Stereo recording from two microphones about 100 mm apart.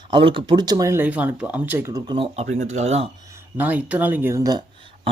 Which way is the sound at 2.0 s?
65° right (ahead or behind).